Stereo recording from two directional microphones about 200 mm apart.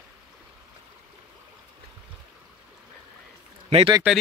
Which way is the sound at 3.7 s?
30° right (ahead or behind).